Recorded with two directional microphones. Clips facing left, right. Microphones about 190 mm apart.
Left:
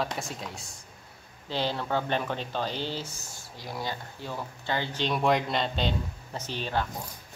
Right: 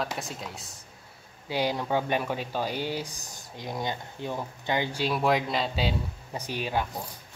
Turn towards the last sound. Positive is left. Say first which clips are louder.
# right 1 dB
turn(degrees=-10)  # may be behind; listen again after turning